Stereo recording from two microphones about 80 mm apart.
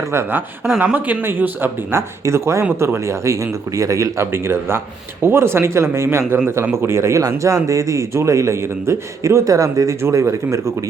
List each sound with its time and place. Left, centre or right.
0.1 s speech: right
4.3 s speech: right